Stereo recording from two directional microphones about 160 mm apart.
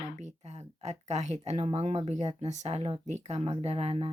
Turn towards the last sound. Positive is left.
turn(degrees=-35)  # may be behind; listen again after turning